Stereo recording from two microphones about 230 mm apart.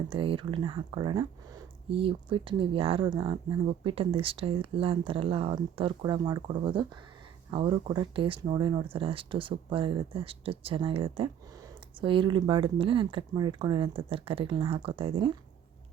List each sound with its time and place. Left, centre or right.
0.1 s speech: right